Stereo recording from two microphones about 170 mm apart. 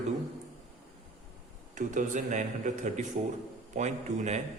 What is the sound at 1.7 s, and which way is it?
A man's voice, 45° right (ahead or behind).